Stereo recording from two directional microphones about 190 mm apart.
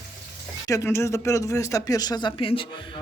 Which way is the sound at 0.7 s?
15° left (ahead or behind).